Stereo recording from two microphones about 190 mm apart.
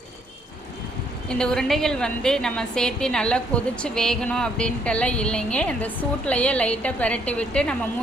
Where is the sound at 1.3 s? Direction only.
5° left (ahead or behind).